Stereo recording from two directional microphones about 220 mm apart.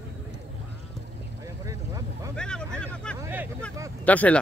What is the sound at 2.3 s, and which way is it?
Vehicle, 5° left (ahead or behind).